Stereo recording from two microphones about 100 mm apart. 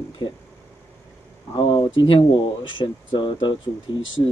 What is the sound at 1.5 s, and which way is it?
Speech, 50° left (ahead or behind).